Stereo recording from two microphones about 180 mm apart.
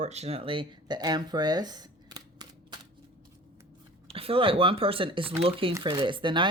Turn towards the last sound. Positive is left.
turn(degrees=-25)  # may be behind; listen again after turning